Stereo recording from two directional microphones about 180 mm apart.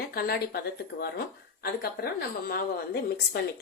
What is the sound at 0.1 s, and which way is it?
A woman's voice, 60° left (ahead or behind).